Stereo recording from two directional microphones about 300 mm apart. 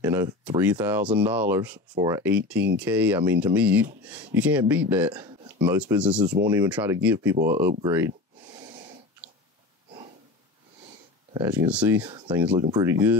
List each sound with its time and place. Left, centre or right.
0.0 s speech: centre
7.8 s a sound: centre
11.3 s speech: centre